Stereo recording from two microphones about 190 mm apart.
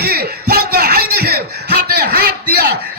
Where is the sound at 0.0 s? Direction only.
55° right (ahead or behind).